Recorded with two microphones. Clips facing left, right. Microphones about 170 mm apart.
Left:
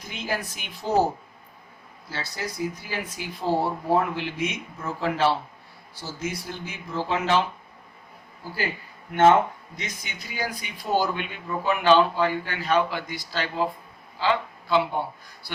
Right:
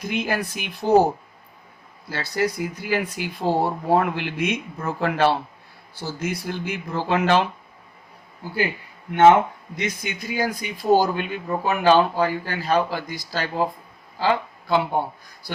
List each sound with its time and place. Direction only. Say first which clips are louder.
0.0 s speech: right 6 dB; 65° right (ahead or behind)
2.0 s speech: right 9 dB; 60° right (ahead or behind)
9.7 s speech: right 13 dB; 65° right (ahead or behind)
10.3 s speech: right 5 dB; 45° right (ahead or behind)